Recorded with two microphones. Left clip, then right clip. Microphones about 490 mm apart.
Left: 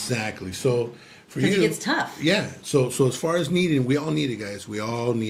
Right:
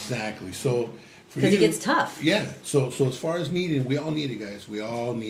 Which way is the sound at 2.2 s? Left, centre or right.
Left.